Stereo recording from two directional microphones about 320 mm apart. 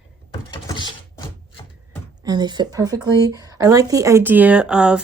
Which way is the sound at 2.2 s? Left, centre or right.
Centre.